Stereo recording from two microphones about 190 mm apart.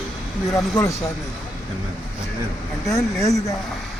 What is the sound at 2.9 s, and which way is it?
Speech, 20° left (ahead or behind).